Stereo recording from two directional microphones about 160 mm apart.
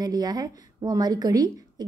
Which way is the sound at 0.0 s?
25° right (ahead or behind).